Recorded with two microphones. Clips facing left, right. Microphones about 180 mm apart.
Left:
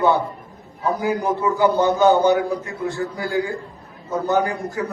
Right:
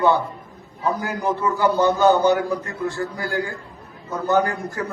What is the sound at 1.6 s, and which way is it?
A man's voice, 20° left (ahead or behind).